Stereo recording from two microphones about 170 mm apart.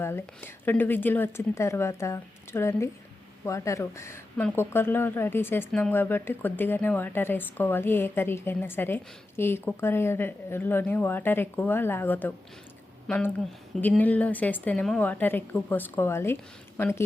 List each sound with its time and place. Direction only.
0.0 s speech: 15° left (ahead or behind)